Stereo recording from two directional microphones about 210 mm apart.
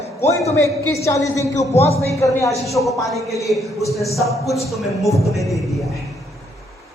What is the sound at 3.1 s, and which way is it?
A man's voice, centre (ahead or behind).